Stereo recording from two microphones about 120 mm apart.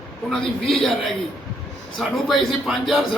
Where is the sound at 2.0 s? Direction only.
Centre (ahead or behind).